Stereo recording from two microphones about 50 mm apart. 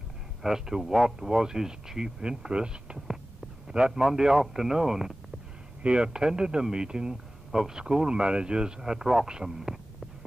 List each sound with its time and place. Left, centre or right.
0.4 s speech: centre
5.8 s speech: centre